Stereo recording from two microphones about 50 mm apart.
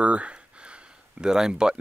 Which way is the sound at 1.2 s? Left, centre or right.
Centre.